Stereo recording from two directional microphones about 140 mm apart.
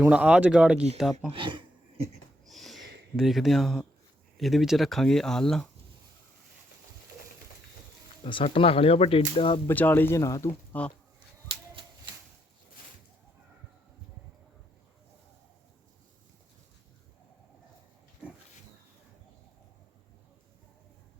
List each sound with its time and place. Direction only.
0.0 s speech: 10° right (ahead or behind)
1.3 s speech: 35° right (ahead or behind)
2.5 s a sound: centre (ahead or behind)
4.4 s speech: centre (ahead or behind)
8.2 s speech: 40° left (ahead or behind)
9.6 s speech: 15° left (ahead or behind)